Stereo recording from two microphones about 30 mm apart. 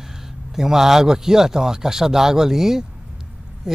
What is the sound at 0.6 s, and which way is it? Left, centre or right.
Speech, centre.